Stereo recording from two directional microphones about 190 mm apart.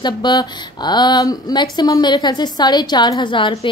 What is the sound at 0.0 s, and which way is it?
Speech, 20° left (ahead or behind).